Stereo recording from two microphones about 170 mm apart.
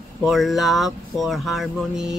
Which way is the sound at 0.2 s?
Centre (ahead or behind).